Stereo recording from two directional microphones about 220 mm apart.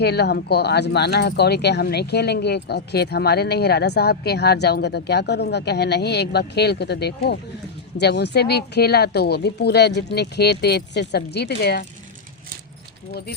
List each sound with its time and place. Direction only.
0.0 s speech: 50° left (ahead or behind)